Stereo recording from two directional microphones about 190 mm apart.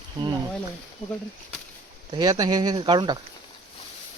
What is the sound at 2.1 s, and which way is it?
Speech, 20° right (ahead or behind).